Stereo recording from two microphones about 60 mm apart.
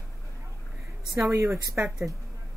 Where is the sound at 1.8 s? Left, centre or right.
Right.